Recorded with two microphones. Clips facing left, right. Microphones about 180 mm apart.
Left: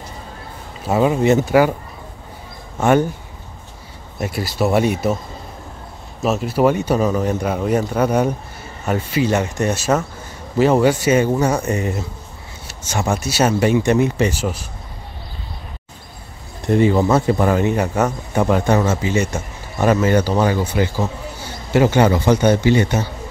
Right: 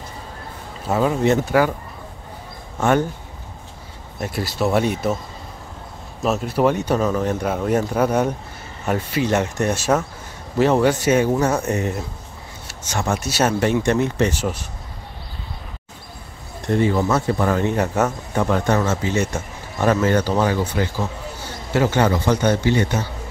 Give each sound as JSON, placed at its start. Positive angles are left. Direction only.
{"t": 0.8, "sound": "speech", "side_deg": 10}
{"t": 2.8, "sound": "speech", "side_deg": 15}
{"t": 4.2, "sound": "speech", "side_deg": 5}
{"t": 6.2, "sound": "speech", "side_deg": 5}
{"t": 13.1, "sound": "speech", "side_deg": 5}
{"t": 16.7, "sound": "speech", "side_deg": 15}
{"t": 17.7, "sound": "speech", "side_deg": 0}